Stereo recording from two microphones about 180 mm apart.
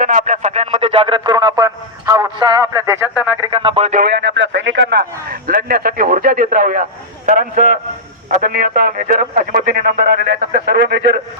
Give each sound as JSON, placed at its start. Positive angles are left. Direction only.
{"t": 0.0, "sound": "music", "side_deg": -45}
{"t": 3.5, "sound": "music", "side_deg": -30}
{"t": 3.9, "sound": "a man's voice", "side_deg": -60}